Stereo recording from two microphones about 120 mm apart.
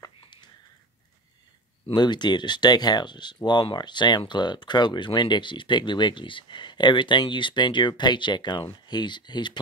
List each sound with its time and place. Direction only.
1.9 s speech: 40° left (ahead or behind)